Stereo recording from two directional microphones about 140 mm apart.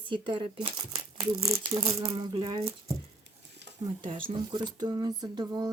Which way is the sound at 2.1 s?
35° right (ahead or behind).